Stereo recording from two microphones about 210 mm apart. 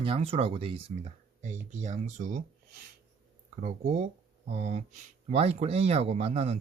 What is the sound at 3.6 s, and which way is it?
Speech, 35° right (ahead or behind).